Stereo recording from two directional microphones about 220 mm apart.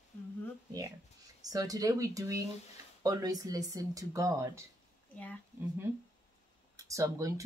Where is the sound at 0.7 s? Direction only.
15° right (ahead or behind).